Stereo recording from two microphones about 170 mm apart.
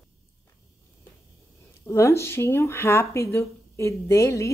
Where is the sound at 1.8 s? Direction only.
15° left (ahead or behind).